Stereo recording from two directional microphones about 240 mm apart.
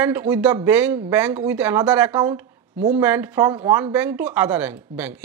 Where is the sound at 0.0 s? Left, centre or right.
Centre.